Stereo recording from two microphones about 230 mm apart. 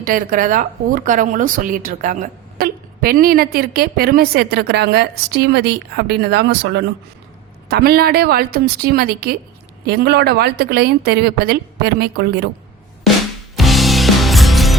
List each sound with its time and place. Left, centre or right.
0.0 s a woman's voice: right
13.6 s music: centre